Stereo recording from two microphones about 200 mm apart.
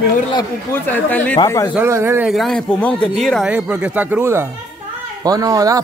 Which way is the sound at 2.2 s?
Centre (ahead or behind).